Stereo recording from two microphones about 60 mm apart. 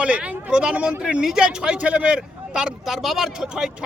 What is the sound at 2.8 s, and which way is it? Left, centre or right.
Speech, centre.